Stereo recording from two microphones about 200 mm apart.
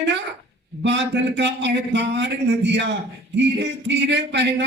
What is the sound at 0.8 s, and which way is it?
A man's voice, 60° right (ahead or behind).